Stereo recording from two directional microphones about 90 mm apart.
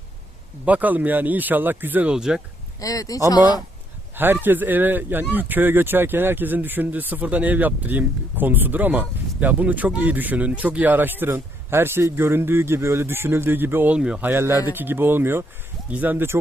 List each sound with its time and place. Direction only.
0.6 s speech: 15° right (ahead or behind)
2.1 s speech: 5° right (ahead or behind)
2.8 s speech: 40° left (ahead or behind)
4.1 s speech: 25° right (ahead or behind)
13.9 s speech: 10° right (ahead or behind)
14.3 s speech: 30° right (ahead or behind)